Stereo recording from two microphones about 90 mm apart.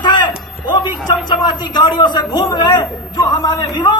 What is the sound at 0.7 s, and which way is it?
A man's voice, 55° left (ahead or behind).